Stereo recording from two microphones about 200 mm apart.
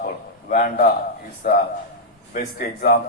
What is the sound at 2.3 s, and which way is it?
Speech, 45° left (ahead or behind).